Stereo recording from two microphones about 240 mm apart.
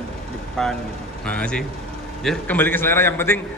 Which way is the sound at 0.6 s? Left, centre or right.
Centre.